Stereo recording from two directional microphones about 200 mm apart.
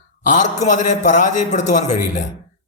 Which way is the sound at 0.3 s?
40° left (ahead or behind).